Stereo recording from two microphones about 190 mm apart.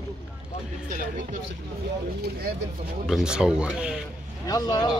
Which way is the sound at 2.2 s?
55° right (ahead or behind).